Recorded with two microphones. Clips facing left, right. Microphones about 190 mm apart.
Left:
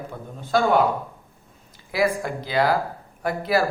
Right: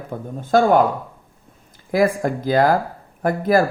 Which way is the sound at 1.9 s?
50° right (ahead or behind).